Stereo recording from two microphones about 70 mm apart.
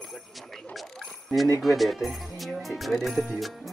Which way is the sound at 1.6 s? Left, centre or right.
Centre.